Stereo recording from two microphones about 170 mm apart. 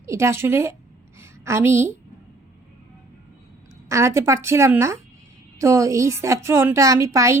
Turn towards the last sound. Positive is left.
turn(degrees=-15)  # may be behind; listen again after turning